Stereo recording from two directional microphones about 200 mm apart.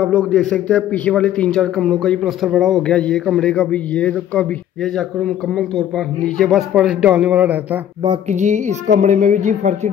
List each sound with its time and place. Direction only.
0.0 s a man's voice: 5° left (ahead or behind)
8.3 s speech: 35° right (ahead or behind)